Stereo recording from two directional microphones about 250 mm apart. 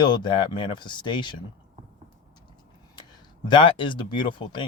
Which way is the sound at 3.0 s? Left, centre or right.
Centre.